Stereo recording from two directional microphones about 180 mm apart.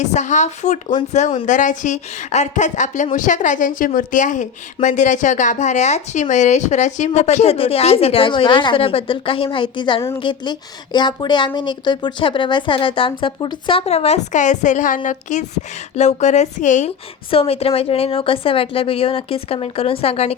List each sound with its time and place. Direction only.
0.0 s a woman's voice: 40° left (ahead or behind)
17.3 s a woman's voice: 30° left (ahead or behind)